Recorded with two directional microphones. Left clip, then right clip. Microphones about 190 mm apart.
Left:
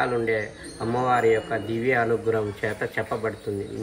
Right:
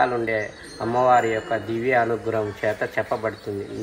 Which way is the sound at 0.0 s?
20° right (ahead or behind).